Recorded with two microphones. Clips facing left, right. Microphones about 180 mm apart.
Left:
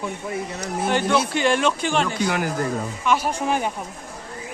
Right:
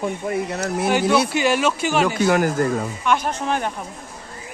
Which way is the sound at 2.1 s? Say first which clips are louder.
Right 5 dB; 45° right (ahead or behind).